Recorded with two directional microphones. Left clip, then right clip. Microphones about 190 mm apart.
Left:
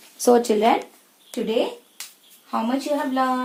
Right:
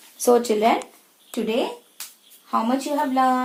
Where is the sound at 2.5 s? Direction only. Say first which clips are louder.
Right 1 dB; 5° right (ahead or behind).